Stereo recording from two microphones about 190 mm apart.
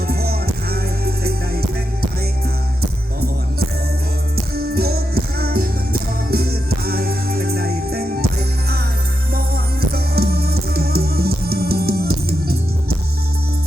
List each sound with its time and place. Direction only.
0.1 s music: 55° right (ahead or behind)
4.5 s music: 55° right (ahead or behind)
9.9 s music: 55° right (ahead or behind)